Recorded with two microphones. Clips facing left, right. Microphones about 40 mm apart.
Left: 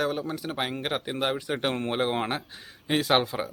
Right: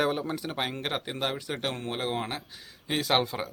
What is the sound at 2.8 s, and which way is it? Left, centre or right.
Speech, centre.